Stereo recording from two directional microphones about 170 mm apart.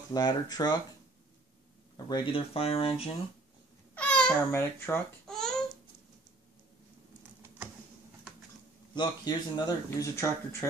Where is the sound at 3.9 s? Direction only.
5° left (ahead or behind).